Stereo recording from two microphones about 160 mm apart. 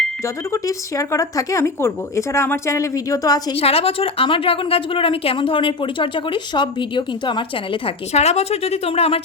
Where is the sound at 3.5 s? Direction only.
35° left (ahead or behind).